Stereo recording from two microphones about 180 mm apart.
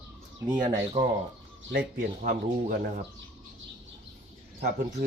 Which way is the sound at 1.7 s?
60° right (ahead or behind).